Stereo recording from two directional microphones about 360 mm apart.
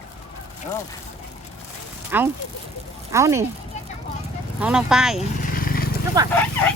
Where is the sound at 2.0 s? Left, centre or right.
Centre.